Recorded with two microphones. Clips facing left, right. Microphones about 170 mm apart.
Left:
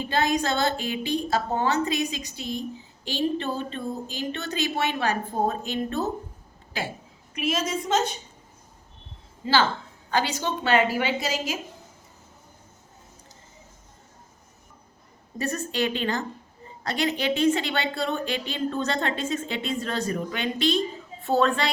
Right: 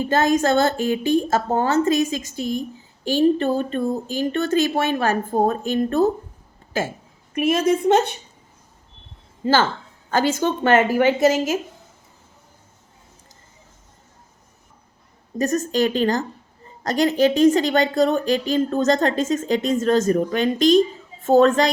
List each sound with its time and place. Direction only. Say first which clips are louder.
0.0 s a woman's voice: right 6 dB; 45° right (ahead or behind)
9.4 s a woman's voice: right 4 dB; 50° right (ahead or behind)
15.4 s a woman's voice: right 7 dB; 40° right (ahead or behind)